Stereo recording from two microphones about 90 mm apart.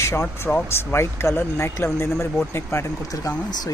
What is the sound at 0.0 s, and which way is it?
Speech, 25° left (ahead or behind).